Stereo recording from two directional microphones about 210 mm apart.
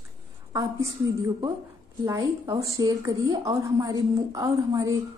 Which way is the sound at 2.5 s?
15° right (ahead or behind).